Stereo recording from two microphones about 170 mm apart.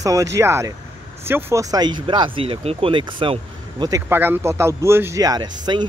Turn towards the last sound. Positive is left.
turn(degrees=-25)  # may be behind; listen again after turning